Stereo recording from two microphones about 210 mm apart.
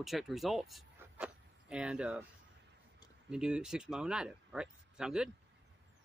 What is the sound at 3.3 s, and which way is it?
Speech, 5° right (ahead or behind).